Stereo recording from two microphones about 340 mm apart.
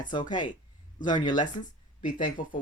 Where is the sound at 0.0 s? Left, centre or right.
Centre.